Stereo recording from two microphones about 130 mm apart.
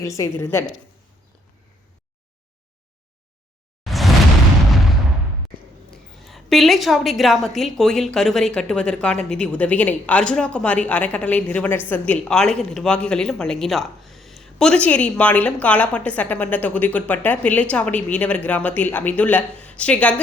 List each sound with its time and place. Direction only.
0.0 s a woman's voice: 25° left (ahead or behind)
3.8 s a sound: centre (ahead or behind)
5.9 s a woman's voice: centre (ahead or behind)